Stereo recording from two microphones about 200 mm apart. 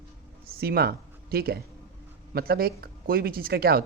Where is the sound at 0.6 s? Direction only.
50° right (ahead or behind).